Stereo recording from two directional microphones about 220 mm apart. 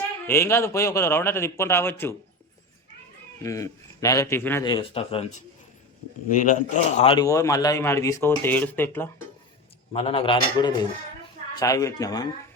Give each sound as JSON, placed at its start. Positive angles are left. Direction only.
{"t": 0.3, "sound": "a man's voice", "side_deg": 10}
{"t": 3.4, "sound": "a man's voice", "side_deg": 15}
{"t": 6.3, "sound": "a man's voice", "side_deg": 35}
{"t": 7.0, "sound": "speech", "side_deg": 25}
{"t": 7.3, "sound": "a man's voice", "side_deg": 15}
{"t": 9.9, "sound": "a man's voice", "side_deg": 25}